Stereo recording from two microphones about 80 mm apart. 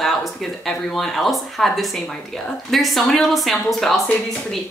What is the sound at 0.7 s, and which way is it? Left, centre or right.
Speech, centre.